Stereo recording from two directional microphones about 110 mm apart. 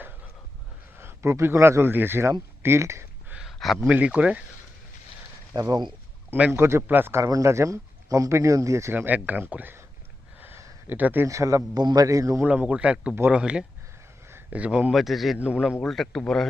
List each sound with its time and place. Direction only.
0.9 s a man's voice: 25° right (ahead or behind)
2.6 s a sound: 25° right (ahead or behind)
3.3 s a sound: centre (ahead or behind)
3.8 s speech: 10° right (ahead or behind)
5.5 s speech: 35° right (ahead or behind); by 9.8 s 15° right (ahead or behind)
10.4 s a sound: 20° right (ahead or behind)
11.3 s speech: 30° right (ahead or behind)
11.8 s speech: 40° right (ahead or behind)
12.0 s speech: 30° right (ahead or behind)
12.4 s speech: 10° right (ahead or behind)
14.3 s a sound: 15° right (ahead or behind)
14.9 s a man's voice: centre (ahead or behind)
15.8 s a man's voice: 5° left (ahead or behind)